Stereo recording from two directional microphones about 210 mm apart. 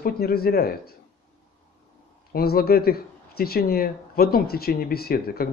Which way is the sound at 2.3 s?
45° left (ahead or behind).